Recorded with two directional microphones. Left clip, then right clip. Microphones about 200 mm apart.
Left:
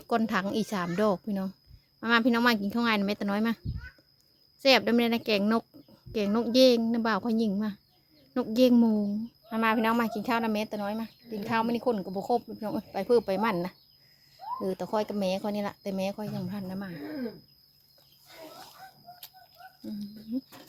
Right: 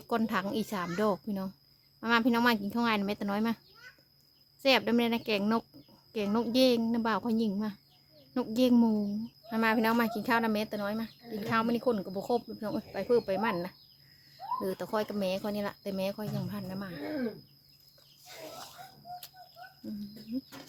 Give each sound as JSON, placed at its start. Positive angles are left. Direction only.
{"t": 0.0, "sound": "speech", "side_deg": 20}
{"t": 4.6, "sound": "speech", "side_deg": 25}
{"t": 9.5, "sound": "speech", "side_deg": 10}
{"t": 19.8, "sound": "speech", "side_deg": 25}